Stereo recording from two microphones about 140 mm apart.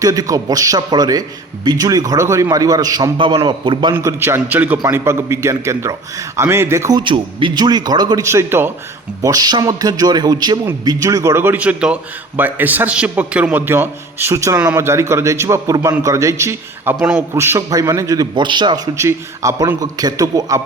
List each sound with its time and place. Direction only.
0.0 s a man's voice: 25° right (ahead or behind)
3.9 s a man's voice: 15° right (ahead or behind)
7.0 s a man's voice: 35° right (ahead or behind); by 8.7 s 15° right (ahead or behind)
9.2 s a man's voice: 25° right (ahead or behind); by 17.2 s 5° right (ahead or behind)
17.3 s a man's voice: 20° right (ahead or behind)
18.9 s a man's voice: 20° right (ahead or behind)